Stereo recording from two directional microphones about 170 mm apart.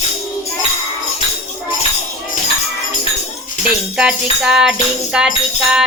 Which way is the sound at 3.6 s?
5° right (ahead or behind).